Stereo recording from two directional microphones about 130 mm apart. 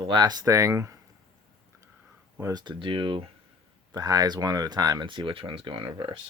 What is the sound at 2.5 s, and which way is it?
Speech, 35° right (ahead or behind).